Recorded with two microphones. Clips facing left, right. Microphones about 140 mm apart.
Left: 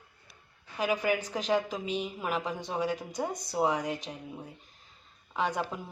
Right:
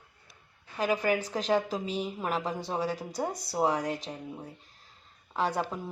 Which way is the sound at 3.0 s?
5° right (ahead or behind).